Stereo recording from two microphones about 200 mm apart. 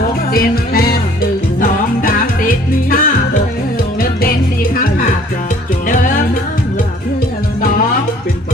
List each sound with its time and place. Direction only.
0.3 s music: 50° left (ahead or behind)
5.9 s music: 40° left (ahead or behind)